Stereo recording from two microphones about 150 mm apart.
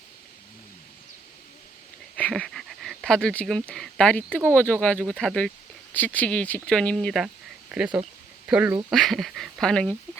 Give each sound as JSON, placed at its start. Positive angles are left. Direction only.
{"t": 2.1, "sound": "speech", "side_deg": 10}
{"t": 8.9, "sound": "speech", "side_deg": 0}